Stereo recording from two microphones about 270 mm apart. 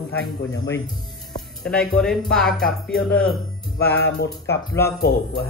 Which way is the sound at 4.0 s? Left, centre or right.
Left.